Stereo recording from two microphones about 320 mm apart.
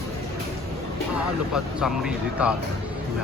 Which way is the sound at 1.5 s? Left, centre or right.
Centre.